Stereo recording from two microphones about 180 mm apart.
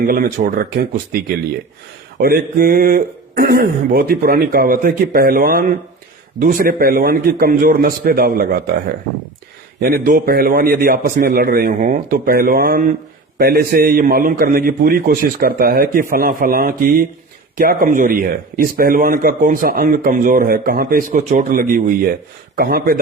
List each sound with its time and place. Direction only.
0.0 s speech: 50° right (ahead or behind)
2.1 s speech: 55° right (ahead or behind)
9.8 s speech: 55° right (ahead or behind)